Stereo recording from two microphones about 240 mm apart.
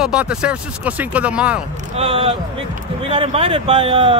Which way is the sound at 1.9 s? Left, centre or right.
Right.